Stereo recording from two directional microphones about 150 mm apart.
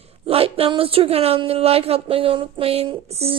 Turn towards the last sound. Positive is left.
turn(degrees=-40)  # may be behind; listen again after turning